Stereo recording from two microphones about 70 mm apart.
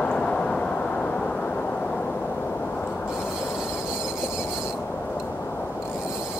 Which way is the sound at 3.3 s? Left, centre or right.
Centre.